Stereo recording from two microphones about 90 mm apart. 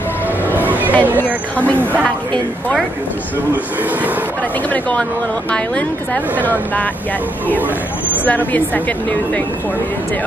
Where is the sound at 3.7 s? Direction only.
20° right (ahead or behind).